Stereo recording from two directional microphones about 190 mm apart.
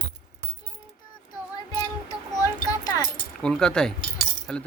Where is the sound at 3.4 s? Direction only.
5° left (ahead or behind).